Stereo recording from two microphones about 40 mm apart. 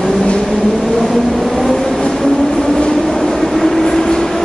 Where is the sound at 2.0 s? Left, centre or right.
Centre.